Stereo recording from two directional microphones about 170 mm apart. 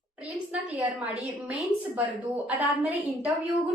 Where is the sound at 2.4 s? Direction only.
10° right (ahead or behind).